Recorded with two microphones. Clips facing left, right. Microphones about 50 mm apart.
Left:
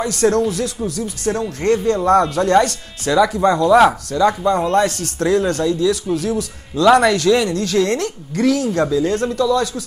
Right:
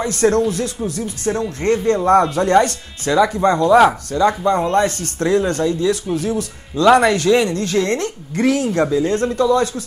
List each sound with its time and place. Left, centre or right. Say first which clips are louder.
0.0 s speech: even; centre
8.4 s speech: even; right
8.7 s speech: even; centre